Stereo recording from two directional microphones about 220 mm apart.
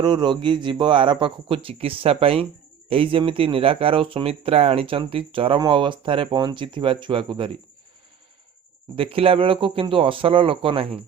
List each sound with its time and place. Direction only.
0.0 s speech: 20° right (ahead or behind)
9.0 s speech: 25° right (ahead or behind)